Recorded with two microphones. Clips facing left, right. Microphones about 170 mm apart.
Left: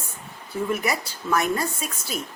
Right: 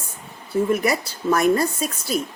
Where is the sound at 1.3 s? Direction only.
40° right (ahead or behind).